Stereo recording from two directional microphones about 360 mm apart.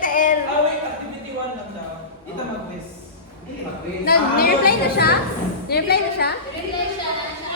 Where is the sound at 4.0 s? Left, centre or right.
Left.